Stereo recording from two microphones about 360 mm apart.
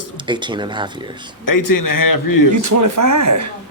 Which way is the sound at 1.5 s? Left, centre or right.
Left.